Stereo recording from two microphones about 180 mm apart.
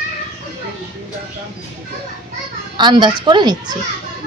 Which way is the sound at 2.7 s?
25° right (ahead or behind).